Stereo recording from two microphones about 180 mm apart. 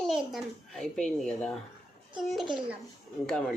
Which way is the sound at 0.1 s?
Centre (ahead or behind).